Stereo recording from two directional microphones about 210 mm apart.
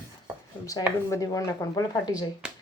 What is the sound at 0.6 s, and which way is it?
Speech, 15° left (ahead or behind).